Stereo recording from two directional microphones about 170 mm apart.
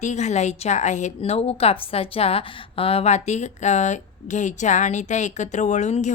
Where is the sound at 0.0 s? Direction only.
45° left (ahead or behind).